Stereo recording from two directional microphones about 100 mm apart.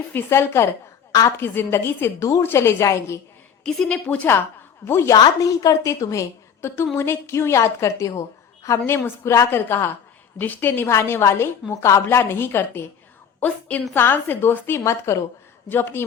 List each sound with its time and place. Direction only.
0.1 s a woman's voice: 25° left (ahead or behind)
3.6 s a woman's voice: 5° left (ahead or behind)
4.9 s a woman's voice: 25° left (ahead or behind)
5.1 s a woman's voice: 40° left (ahead or behind); by 16.0 s 20° left (ahead or behind)